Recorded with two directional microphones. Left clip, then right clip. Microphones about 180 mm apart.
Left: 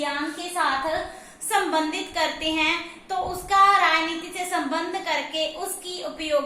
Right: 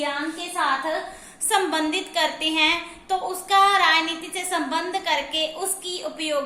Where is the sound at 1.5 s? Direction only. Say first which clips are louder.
Right 1 dB; 45° right (ahead or behind).